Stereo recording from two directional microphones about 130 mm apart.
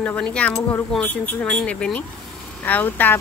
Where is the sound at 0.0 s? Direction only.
10° left (ahead or behind).